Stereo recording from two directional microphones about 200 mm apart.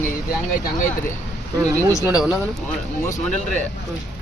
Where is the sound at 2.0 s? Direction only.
5° right (ahead or behind).